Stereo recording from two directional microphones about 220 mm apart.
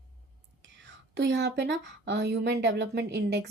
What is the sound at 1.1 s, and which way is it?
Speech, 50° right (ahead or behind).